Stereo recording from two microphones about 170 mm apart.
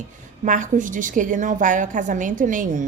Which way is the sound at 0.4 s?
50° right (ahead or behind).